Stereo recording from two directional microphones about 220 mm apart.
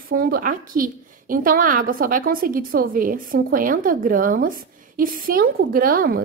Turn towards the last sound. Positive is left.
turn(degrees=-40)  # may be behind; listen again after turning